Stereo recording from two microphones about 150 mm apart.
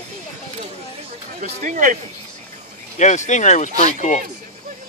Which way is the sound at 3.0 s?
50° left (ahead or behind).